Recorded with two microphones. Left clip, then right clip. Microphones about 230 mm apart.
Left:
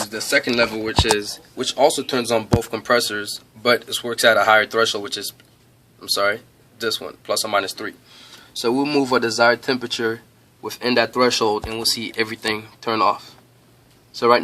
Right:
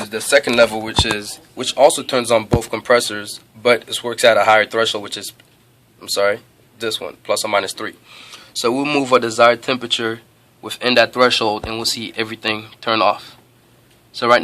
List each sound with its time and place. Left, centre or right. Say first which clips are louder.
0.1 s speech: right 6 dB; right
1.1 s speech: left 3 dB; centre
14.2 s speech: right 2 dB; centre